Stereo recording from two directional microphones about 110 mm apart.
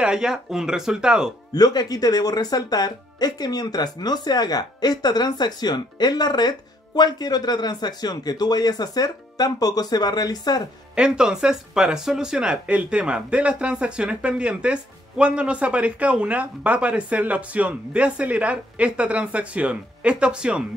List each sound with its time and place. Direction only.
0.0 s speech: 5° right (ahead or behind)
1.5 s speech: 40° left (ahead or behind)
11.0 s speech: 5° right (ahead or behind)